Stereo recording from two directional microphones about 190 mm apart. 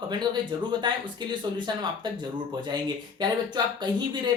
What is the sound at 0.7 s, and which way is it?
Speech, 25° right (ahead or behind).